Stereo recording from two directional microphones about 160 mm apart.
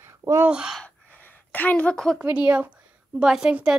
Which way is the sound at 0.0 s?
20° right (ahead or behind).